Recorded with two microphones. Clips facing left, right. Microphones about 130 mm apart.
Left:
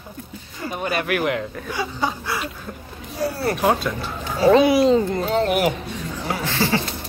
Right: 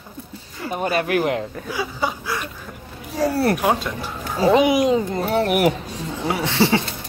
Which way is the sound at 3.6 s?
15° right (ahead or behind).